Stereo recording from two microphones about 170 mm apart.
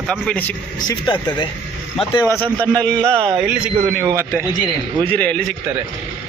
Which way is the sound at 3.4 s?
5° right (ahead or behind).